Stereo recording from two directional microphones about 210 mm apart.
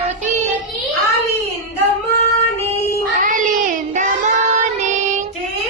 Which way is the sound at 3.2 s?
40° right (ahead or behind).